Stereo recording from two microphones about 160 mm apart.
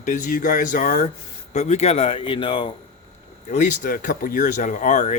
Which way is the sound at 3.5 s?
50° left (ahead or behind).